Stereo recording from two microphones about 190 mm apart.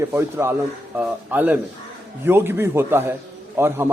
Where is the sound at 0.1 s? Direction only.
15° right (ahead or behind).